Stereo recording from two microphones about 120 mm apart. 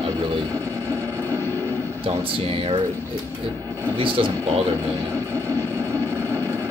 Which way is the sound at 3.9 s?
45° right (ahead or behind).